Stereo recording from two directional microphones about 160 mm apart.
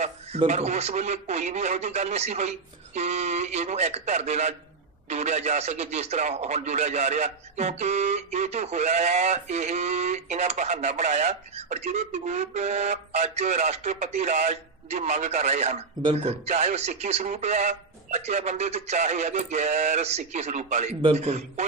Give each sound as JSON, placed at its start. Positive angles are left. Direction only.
{"t": 0.5, "sound": "speech", "side_deg": -45}